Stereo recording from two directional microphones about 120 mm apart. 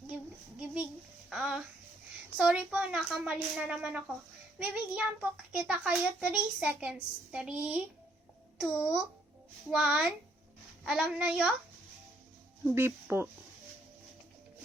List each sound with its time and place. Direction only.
1.3 s a child's voice: 5° right (ahead or behind)
12.7 s speech: 20° right (ahead or behind)